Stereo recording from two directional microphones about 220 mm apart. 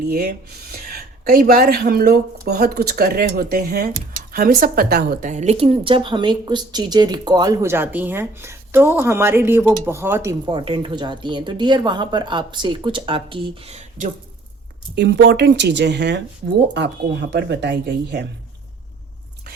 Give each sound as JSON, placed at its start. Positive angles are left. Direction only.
{"t": 0.0, "sound": "a woman's voice", "side_deg": -45}
{"t": 14.9, "sound": "speech", "side_deg": -50}